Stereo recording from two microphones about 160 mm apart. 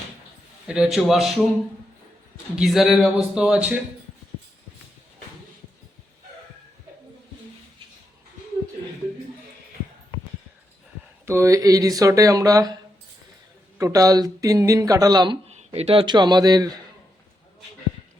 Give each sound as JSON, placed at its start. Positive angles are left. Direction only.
{"t": 0.7, "sound": "speech", "side_deg": -5}
{"t": 2.6, "sound": "speech", "side_deg": 0}
{"t": 11.3, "sound": "speech", "side_deg": -20}
{"t": 15.4, "sound": "speech", "side_deg": -40}